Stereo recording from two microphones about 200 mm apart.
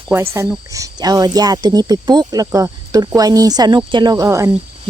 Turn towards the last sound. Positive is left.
turn(degrees=-15)  # may be behind; listen again after turning